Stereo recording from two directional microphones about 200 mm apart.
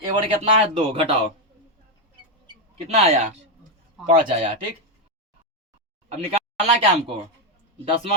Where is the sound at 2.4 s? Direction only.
30° right (ahead or behind).